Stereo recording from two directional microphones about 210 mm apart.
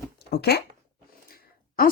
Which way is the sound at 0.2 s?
50° left (ahead or behind).